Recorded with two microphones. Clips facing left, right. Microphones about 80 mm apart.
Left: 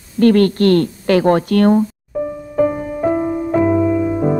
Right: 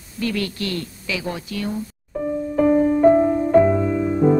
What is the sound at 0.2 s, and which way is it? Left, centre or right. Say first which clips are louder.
A woman's voice: left 13 dB; left.